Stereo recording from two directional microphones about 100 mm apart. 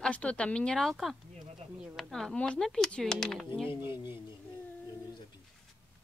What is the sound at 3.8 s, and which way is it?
Speech, 20° right (ahead or behind).